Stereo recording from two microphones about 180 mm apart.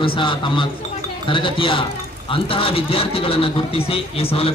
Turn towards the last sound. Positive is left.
turn(degrees=30)  # may be behind; listen again after turning